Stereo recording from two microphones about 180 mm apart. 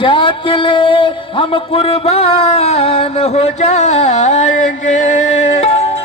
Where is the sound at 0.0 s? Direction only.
30° left (ahead or behind).